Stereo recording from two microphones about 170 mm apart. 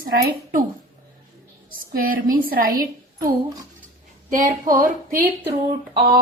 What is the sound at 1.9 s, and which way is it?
A woman's voice, 60° right (ahead or behind).